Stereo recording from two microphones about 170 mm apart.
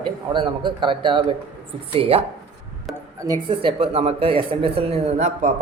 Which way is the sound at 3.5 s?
35° right (ahead or behind).